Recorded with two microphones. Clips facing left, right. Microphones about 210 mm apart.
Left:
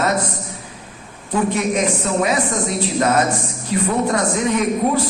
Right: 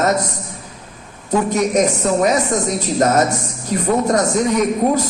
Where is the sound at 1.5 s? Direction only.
40° right (ahead or behind).